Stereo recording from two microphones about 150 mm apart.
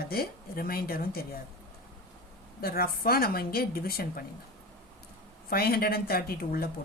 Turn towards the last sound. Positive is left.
turn(degrees=90)